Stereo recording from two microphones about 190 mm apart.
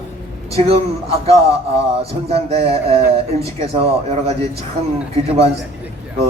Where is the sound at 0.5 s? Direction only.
30° right (ahead or behind).